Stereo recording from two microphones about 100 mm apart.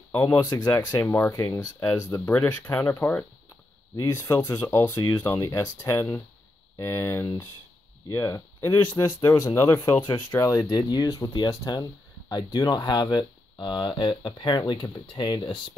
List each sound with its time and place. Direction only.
0.1 s speech: 20° left (ahead or behind)
0.4 s speech: 40° left (ahead or behind)
1.0 s speech: 20° left (ahead or behind)
1.3 s speech: 40° left (ahead or behind)
2.0 s speech: 20° left (ahead or behind)
3.9 s speech: 35° left (ahead or behind); by 15.7 s 50° left (ahead or behind)